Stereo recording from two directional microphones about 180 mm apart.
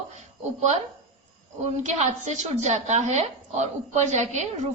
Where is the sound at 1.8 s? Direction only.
40° right (ahead or behind).